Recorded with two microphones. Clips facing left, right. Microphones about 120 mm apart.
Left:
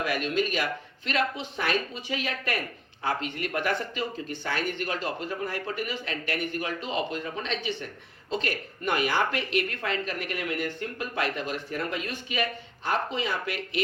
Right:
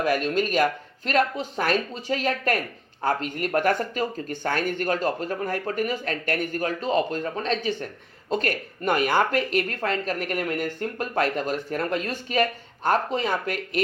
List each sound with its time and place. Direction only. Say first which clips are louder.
0.0 s speech: right 4 dB; 40° right (ahead or behind)